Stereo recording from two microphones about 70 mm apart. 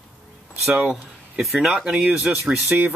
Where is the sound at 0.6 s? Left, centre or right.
Centre.